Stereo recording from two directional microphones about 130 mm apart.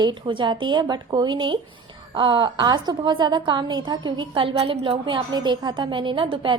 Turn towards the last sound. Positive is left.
turn(degrees=-40)  # may be behind; listen again after turning